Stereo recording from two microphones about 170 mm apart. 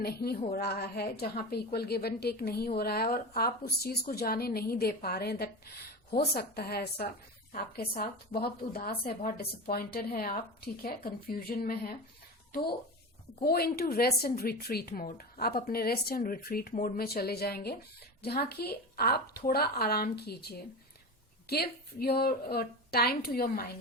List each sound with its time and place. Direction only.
0.0 s a woman's voice: 65° left (ahead or behind)
13.4 s a woman's voice: 65° left (ahead or behind)